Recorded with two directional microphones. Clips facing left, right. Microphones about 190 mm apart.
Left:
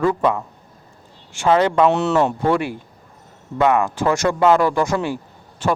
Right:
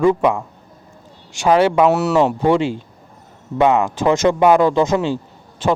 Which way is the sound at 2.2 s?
15° right (ahead or behind).